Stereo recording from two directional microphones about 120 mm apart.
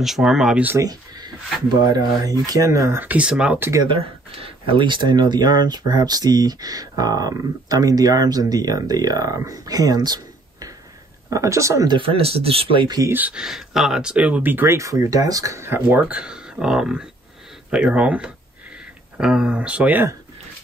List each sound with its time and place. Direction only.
0.0 s speech: centre (ahead or behind)
0.8 s speech: 35° right (ahead or behind); by 3.6 s 10° right (ahead or behind)
3.8 s speech: 50° right (ahead or behind); by 11.9 s 25° right (ahead or behind)
11.9 s speech: 50° right (ahead or behind)
12.8 s speech: 35° right (ahead or behind)
13.1 s speech: 10° right (ahead or behind)